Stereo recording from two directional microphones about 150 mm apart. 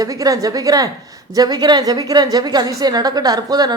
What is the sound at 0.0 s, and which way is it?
Speech, 25° right (ahead or behind).